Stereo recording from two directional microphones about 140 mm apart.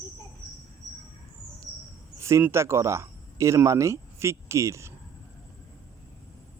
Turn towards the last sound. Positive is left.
turn(degrees=-20)  # may be behind; listen again after turning